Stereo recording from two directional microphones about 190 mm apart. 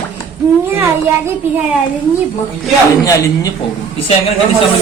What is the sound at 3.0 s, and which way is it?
Speech, 15° left (ahead or behind).